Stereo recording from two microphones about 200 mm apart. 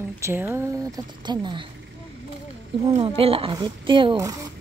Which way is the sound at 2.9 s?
30° right (ahead or behind).